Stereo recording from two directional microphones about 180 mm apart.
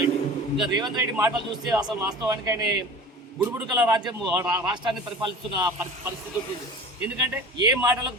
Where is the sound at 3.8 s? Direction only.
20° right (ahead or behind).